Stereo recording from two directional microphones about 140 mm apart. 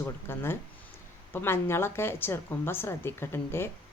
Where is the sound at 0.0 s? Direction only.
15° left (ahead or behind).